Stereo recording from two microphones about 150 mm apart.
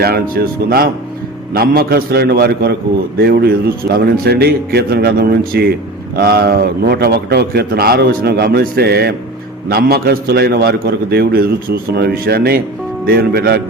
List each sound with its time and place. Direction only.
0.0 s a man's voice: 90° right